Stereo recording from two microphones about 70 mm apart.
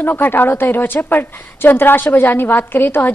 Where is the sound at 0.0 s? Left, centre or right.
Left.